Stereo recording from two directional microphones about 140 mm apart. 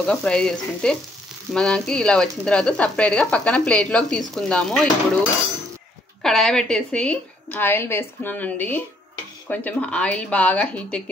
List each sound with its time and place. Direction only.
0.0 s stir: 5° left (ahead or behind)
1.5 s speech: 5° left (ahead or behind)
6.2 s speech: 5° left (ahead or behind)